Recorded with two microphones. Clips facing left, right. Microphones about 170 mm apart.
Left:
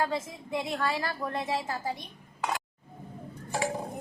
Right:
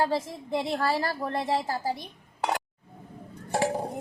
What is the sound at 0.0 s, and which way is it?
A woman's voice, 35° right (ahead or behind).